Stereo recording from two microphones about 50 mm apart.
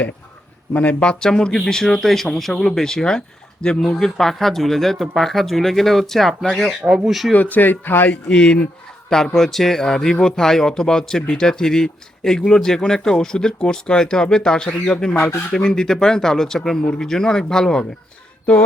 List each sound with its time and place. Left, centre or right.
0.7 s speech: left
1.2 s a man's voice: centre
7.5 s speech: left
8.3 s a man's voice: centre